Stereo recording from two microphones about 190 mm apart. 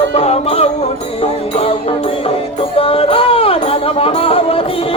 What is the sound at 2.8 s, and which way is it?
Music, 30° left (ahead or behind).